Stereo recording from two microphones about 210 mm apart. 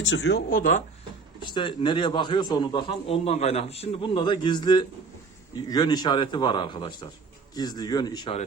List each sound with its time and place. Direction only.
0.0 s speech: 60° left (ahead or behind); by 0.8 s 40° left (ahead or behind)
1.4 s a man's voice: 20° left (ahead or behind)